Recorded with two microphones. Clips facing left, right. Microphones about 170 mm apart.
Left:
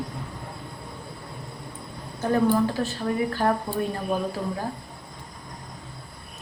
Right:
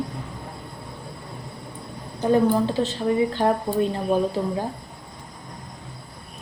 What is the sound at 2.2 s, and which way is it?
Speech, 20° right (ahead or behind).